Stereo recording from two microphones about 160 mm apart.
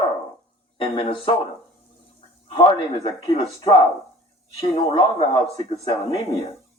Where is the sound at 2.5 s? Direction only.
35° left (ahead or behind).